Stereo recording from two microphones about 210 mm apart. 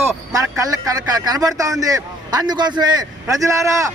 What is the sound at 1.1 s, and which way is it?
A man's voice, 20° right (ahead or behind).